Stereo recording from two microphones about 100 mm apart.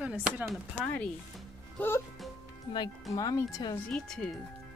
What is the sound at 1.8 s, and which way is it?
Music, 25° left (ahead or behind).